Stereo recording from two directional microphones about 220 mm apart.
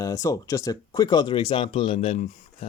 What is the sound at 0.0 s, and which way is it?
Speech, 15° left (ahead or behind).